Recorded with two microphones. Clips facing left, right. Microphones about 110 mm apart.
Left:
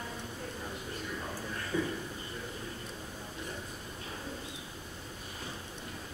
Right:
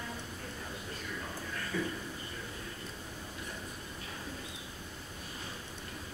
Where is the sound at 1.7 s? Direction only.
20° left (ahead or behind).